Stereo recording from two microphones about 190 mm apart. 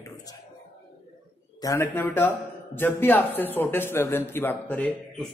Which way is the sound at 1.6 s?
15° left (ahead or behind).